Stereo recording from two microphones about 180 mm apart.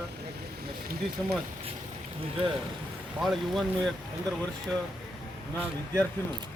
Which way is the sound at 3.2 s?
Centre (ahead or behind).